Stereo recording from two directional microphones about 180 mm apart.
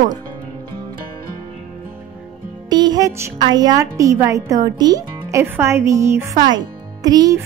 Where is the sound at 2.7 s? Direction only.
20° right (ahead or behind).